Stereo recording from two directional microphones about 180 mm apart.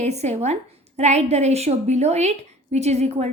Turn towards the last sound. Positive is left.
turn(degrees=-35)  # may be behind; listen again after turning